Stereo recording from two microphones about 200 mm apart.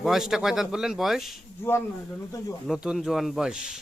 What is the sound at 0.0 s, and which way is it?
Speech, centre (ahead or behind).